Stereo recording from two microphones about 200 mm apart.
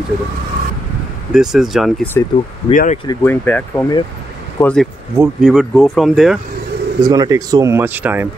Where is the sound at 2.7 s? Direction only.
35° left (ahead or behind).